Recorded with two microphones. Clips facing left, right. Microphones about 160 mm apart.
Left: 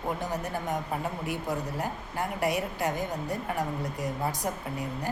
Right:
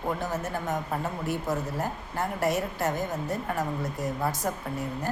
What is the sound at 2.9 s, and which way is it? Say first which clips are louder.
A woman's voice: right 2 dB; 15° left (ahead or behind).